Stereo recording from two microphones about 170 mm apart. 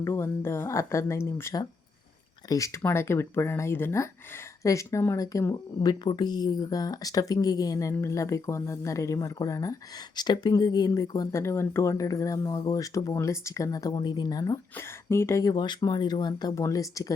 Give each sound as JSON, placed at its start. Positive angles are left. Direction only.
{"t": 0.0, "sound": "speech", "side_deg": 15}